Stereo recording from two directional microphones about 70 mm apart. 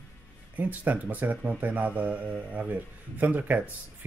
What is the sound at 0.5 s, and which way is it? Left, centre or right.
Speech, right.